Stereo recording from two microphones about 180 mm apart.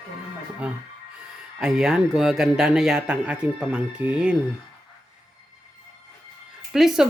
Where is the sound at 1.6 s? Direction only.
5° right (ahead or behind).